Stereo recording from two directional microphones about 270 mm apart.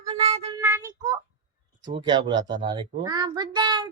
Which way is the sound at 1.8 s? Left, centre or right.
Centre.